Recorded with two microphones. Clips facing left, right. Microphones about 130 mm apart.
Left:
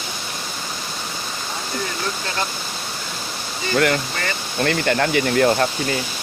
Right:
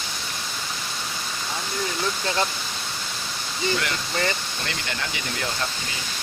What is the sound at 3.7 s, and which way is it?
Speech, 55° left (ahead or behind).